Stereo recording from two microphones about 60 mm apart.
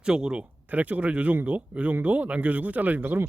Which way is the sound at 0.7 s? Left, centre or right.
Right.